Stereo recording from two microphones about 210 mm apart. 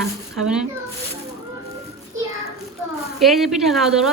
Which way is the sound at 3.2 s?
Centre (ahead or behind).